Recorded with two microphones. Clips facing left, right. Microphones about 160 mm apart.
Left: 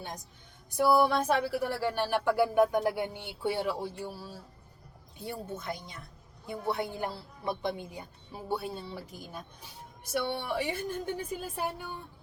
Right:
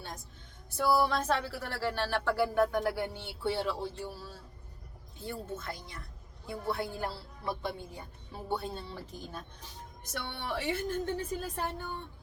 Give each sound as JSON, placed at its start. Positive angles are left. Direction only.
{"t": 0.8, "sound": "a woman's voice", "side_deg": 15}